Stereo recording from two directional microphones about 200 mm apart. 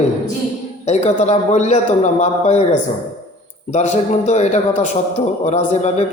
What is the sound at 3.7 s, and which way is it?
A man's voice, 35° left (ahead or behind).